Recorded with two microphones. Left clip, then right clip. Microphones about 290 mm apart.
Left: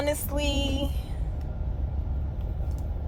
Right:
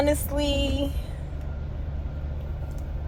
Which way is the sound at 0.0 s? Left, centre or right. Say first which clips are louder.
Right 4 dB; centre.